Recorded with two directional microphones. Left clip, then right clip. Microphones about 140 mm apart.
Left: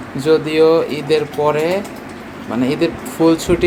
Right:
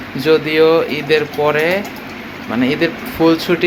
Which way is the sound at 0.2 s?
10° left (ahead or behind).